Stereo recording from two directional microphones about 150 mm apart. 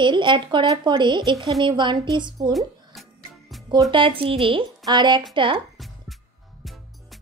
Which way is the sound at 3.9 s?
35° right (ahead or behind).